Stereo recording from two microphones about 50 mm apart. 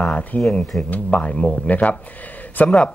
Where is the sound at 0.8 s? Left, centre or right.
Left.